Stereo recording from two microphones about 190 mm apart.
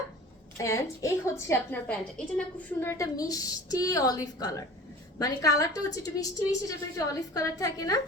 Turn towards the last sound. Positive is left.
turn(degrees=20)  # may be behind; listen again after turning